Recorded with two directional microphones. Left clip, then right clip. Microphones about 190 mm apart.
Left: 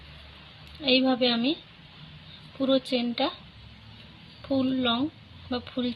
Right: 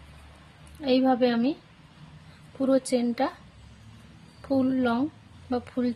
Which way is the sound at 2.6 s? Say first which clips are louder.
Right 1 dB; 15° right (ahead or behind).